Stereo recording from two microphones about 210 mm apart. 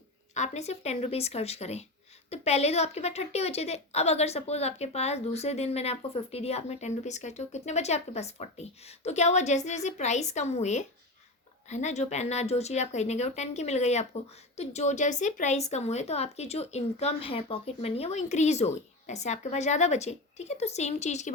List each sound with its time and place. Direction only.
0.3 s speech: 35° left (ahead or behind)